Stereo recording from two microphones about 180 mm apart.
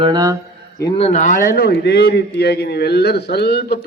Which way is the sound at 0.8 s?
30° left (ahead or behind).